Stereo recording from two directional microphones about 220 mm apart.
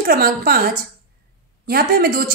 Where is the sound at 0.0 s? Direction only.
40° right (ahead or behind).